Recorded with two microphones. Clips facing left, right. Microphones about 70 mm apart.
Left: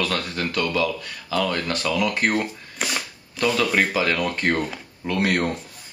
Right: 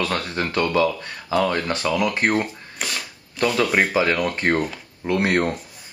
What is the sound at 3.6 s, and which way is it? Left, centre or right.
Speech, centre.